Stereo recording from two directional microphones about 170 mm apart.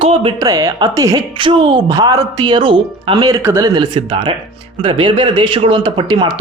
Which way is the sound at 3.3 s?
15° right (ahead or behind).